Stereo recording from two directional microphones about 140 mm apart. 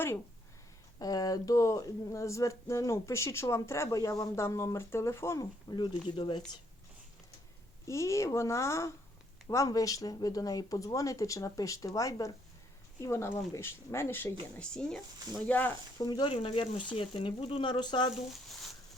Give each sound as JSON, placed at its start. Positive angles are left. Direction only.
{"t": 0.9, "sound": "speech", "side_deg": 25}
{"t": 5.7, "sound": "speech", "side_deg": 35}
{"t": 7.9, "sound": "speech", "side_deg": 20}
{"t": 14.5, "sound": "speech", "side_deg": 5}
{"t": 16.0, "sound": "speech", "side_deg": 30}
{"t": 16.3, "sound": "speech", "side_deg": 40}